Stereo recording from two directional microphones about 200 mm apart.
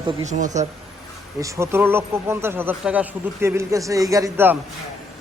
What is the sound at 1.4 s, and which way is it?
Speech, 15° right (ahead or behind).